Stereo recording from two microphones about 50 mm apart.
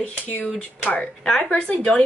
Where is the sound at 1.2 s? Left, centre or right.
Centre.